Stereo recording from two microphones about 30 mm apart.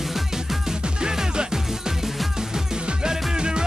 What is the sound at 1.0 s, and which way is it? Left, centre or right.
Music, right.